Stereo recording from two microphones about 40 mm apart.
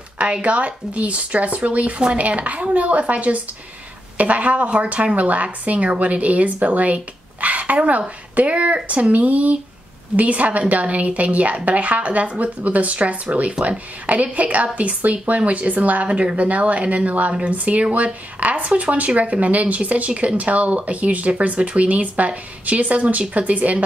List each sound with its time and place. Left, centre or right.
0.2 s speech: right
17.3 s speech: right
17.6 s speech: right